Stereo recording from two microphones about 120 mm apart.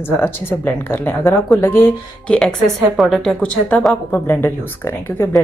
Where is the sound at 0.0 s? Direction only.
15° left (ahead or behind).